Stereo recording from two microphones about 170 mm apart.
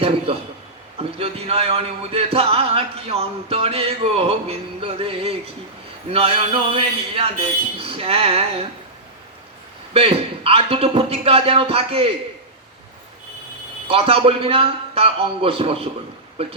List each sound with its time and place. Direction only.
0.9 s speech: 35° right (ahead or behind)
9.9 s speech: 35° right (ahead or behind)
13.8 s speech: 35° right (ahead or behind)